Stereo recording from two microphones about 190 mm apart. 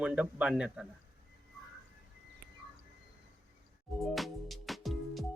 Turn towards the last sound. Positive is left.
turn(degrees=0)  # may be behind; listen again after turning